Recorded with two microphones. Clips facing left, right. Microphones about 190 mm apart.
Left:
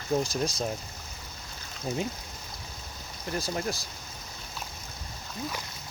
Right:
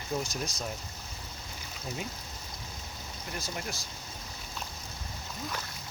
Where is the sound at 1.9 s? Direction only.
35° left (ahead or behind).